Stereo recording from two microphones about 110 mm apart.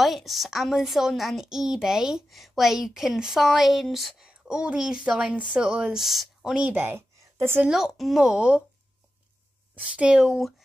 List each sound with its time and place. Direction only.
0.0 s a woman's voice: centre (ahead or behind); by 7.6 s 20° right (ahead or behind)
7.6 s a woman's voice: 5° right (ahead or behind)
9.8 s a woman's voice: 10° right (ahead or behind)